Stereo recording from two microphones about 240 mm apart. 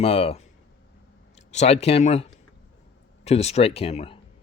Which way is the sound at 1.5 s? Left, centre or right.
Left.